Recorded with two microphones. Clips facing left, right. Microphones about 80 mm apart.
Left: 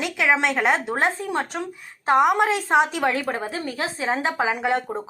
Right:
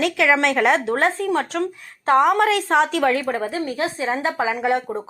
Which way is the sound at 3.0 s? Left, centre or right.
Left.